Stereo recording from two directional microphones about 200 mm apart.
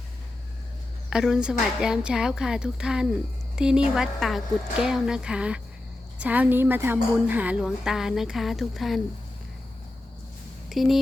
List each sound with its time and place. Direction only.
1.1 s a woman's voice: 5° right (ahead or behind)
10.7 s speech: centre (ahead or behind)